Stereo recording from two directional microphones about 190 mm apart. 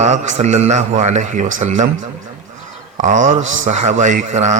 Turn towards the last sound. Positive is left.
turn(degrees=-40)  # may be behind; listen again after turning